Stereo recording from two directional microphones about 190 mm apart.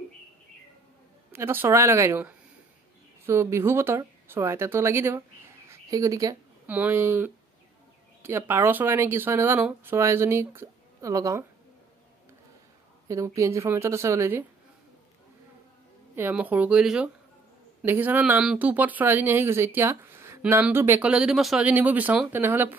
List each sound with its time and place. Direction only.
1.3 s speech: 10° right (ahead or behind)
13.1 s speech: 15° right (ahead or behind)
16.2 s speech: 10° right (ahead or behind)